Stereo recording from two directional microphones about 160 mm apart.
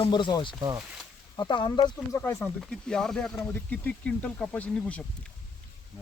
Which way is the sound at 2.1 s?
15° left (ahead or behind).